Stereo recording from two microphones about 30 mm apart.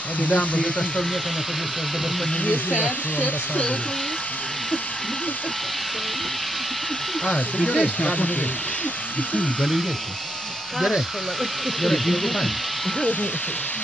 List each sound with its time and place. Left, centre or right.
0.2 s speech: left
2.4 s speech: left
7.3 s speech: left
11.8 s speech: centre